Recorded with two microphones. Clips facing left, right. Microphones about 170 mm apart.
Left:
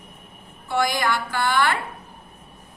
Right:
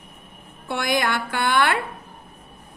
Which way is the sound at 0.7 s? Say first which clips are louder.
Left 1 dB; 55° right (ahead or behind).